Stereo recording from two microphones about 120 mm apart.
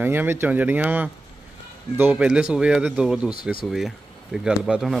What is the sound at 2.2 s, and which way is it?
Speech, 10° right (ahead or behind).